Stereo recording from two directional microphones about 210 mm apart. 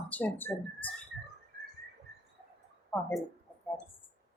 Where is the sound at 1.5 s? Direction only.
50° right (ahead or behind).